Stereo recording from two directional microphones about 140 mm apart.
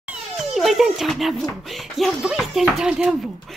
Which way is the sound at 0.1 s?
Centre (ahead or behind).